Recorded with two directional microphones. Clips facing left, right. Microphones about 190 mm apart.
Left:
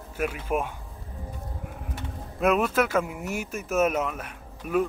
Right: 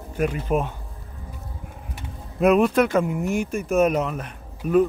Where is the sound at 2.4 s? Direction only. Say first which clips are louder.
Right 6 dB; centre (ahead or behind).